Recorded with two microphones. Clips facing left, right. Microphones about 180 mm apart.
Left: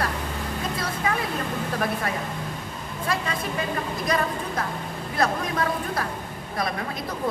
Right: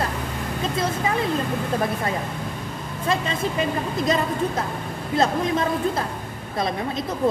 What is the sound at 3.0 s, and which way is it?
Speech, 25° right (ahead or behind).